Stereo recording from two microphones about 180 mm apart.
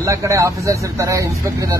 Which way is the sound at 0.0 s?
15° right (ahead or behind).